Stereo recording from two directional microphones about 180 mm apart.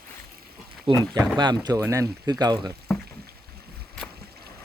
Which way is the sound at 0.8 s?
20° right (ahead or behind).